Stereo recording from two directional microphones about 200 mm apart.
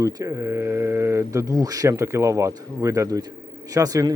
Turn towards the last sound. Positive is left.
turn(degrees=-20)  # may be behind; listen again after turning